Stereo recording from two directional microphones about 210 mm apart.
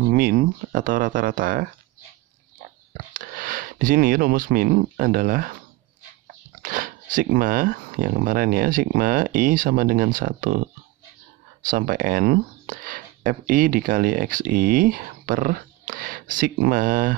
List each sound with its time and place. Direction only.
0.1 s speech: 45° right (ahead or behind)
3.1 s speech: 40° right (ahead or behind)
6.6 s speech: 40° right (ahead or behind)